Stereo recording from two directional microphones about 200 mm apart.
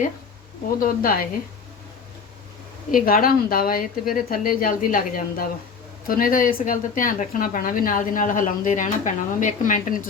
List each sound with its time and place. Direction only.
0.8 s a woman's voice: 45° left (ahead or behind)
2.9 s a woman's voice: 45° left (ahead or behind)